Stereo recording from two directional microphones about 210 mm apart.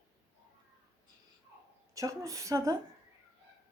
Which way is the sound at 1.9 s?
15° right (ahead or behind).